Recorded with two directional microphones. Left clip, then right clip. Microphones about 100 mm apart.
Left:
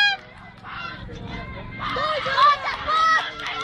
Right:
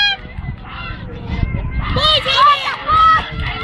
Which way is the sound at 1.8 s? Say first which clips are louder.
Right 9 dB; 25° left (ahead or behind).